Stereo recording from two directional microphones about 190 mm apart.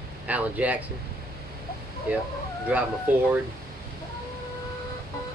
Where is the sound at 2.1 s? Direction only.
5° right (ahead or behind).